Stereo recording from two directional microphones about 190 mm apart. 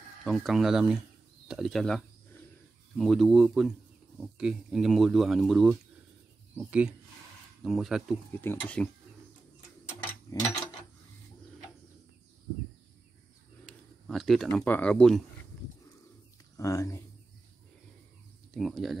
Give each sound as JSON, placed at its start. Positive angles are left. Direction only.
{"t": 0.2, "sound": "speech", "side_deg": 0}
{"t": 8.3, "sound": "speech", "side_deg": 10}
{"t": 10.3, "sound": "speech", "side_deg": 15}
{"t": 14.0, "sound": "speech", "side_deg": 0}
{"t": 16.5, "sound": "speech", "side_deg": 15}
{"t": 18.5, "sound": "speech", "side_deg": 0}